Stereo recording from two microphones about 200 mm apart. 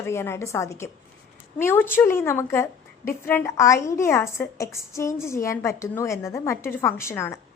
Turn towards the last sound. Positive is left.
turn(degrees=15)  # may be behind; listen again after turning